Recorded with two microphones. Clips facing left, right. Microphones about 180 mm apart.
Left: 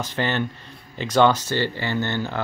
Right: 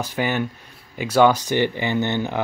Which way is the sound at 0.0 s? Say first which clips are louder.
Right 1 dB; 10° right (ahead or behind).